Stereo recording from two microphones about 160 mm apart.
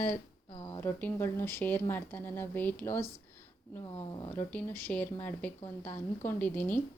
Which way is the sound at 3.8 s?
30° left (ahead or behind).